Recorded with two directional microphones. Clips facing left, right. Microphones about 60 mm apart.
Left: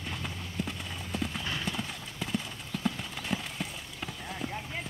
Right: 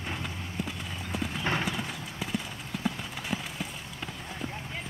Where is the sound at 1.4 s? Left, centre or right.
Right.